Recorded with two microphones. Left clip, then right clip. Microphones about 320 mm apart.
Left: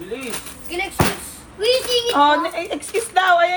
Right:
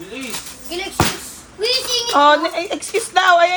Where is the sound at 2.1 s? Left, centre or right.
Right.